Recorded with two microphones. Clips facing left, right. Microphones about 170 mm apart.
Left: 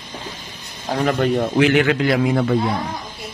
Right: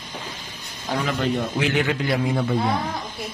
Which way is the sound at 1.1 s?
60° left (ahead or behind).